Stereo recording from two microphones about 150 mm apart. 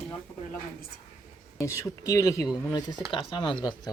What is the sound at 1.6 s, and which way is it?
Speech, 20° left (ahead or behind).